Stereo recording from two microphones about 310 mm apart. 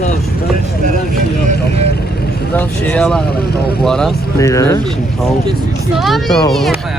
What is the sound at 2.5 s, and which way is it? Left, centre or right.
Speech, centre.